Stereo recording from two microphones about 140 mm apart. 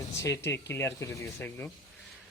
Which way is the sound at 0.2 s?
20° left (ahead or behind).